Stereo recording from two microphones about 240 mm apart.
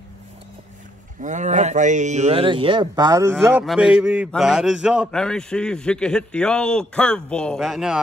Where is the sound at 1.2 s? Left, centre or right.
Right.